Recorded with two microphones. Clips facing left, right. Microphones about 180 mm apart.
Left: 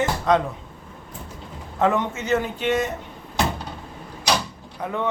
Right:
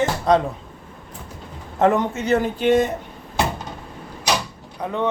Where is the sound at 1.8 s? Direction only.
40° right (ahead or behind).